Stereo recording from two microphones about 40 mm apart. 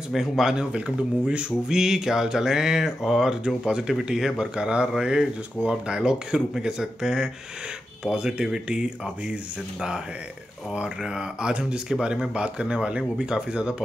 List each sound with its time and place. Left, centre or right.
0.1 s speech: centre
0.7 s speech: right
1.7 s speech: centre